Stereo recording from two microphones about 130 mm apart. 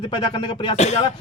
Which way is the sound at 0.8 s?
60° left (ahead or behind).